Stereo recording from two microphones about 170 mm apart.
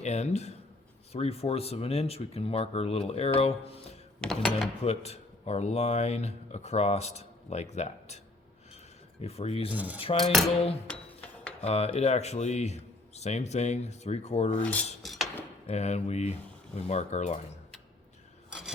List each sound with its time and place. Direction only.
0.0 s speech: 40° left (ahead or behind)
4.2 s speech: 5° left (ahead or behind)
4.8 s speech: 40° left (ahead or behind)
9.2 s speech: 40° left (ahead or behind)
9.7 s cutlery: 10° right (ahead or behind)
10.0 s speech: 35° left (ahead or behind)
10.8 s dishes: 5° left (ahead or behind)
11.6 s speech: 40° left (ahead or behind)
14.6 s cutlery: 10° left (ahead or behind)
15.0 s a sound: centre (ahead or behind)
15.6 s speech: 40° left (ahead or behind)